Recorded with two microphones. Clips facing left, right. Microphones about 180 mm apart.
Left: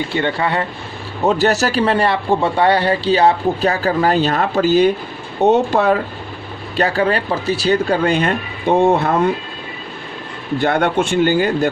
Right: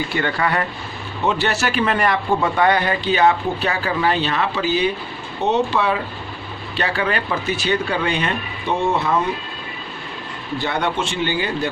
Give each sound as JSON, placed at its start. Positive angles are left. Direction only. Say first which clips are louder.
{"t": 0.1, "sound": "speech", "louder": "left 3 dB", "side_deg": 25}
{"t": 1.2, "sound": "speech", "louder": "left 5 dB", "side_deg": 40}
{"t": 10.6, "sound": "speech", "louder": "left 6 dB", "side_deg": 55}